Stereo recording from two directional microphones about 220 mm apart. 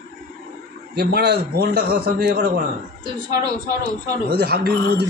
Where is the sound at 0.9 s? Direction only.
45° right (ahead or behind).